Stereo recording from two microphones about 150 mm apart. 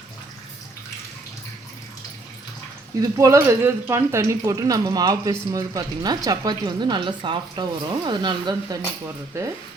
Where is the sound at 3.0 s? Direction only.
20° right (ahead or behind).